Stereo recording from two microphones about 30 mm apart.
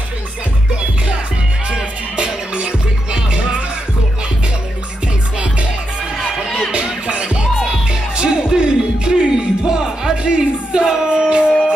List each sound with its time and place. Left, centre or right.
2.1 s music: right
7.1 s music: right
7.6 s music: right